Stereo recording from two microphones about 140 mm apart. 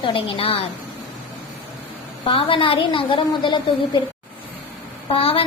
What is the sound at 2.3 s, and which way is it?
A woman's voice, 40° left (ahead or behind).